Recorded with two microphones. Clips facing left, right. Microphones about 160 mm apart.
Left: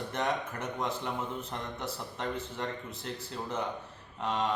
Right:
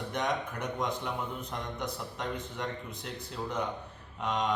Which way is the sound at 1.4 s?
15° right (ahead or behind).